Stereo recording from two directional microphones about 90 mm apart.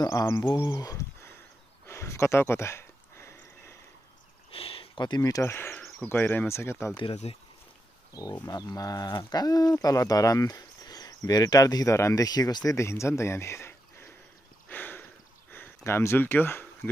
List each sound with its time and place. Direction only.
0.0 s speech: 40° left (ahead or behind)
0.4 s speech: 50° left (ahead or behind); by 1.4 s 30° left (ahead or behind)
1.9 s a sound: 30° left (ahead or behind)
4.5 s a sound: 90° left; by 5.2 s 60° left (ahead or behind)
5.2 s speech: 40° left (ahead or behind)
5.5 s speech: 25° left (ahead or behind)
7.2 s speech: 90° left
8.1 s speech: 40° left (ahead or behind)
12.3 s speech: 45° left (ahead or behind)
12.7 s speech: 30° left (ahead or behind)
14.7 s sniff: 20° left (ahead or behind)
15.5 s speech: 25° left (ahead or behind)